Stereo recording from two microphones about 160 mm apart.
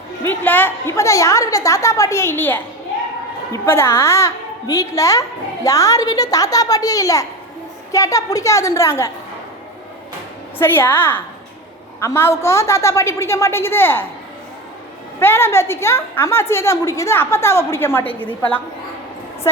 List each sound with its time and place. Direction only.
0.3 s a woman's voice: 10° left (ahead or behind)
10.6 s a woman's voice: 15° left (ahead or behind)
15.2 s a woman's voice: 15° left (ahead or behind)